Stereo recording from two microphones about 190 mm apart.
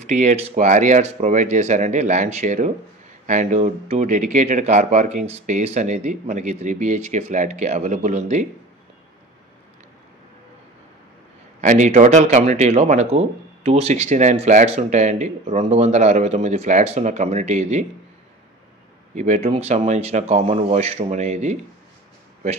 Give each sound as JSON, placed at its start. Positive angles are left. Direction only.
{"t": 0.0, "sound": "speech", "side_deg": -40}
{"t": 11.6, "sound": "speech", "side_deg": -40}
{"t": 19.1, "sound": "speech", "side_deg": -35}